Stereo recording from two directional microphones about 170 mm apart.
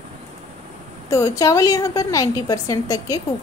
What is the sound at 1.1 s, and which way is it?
A woman's voice, 20° left (ahead or behind).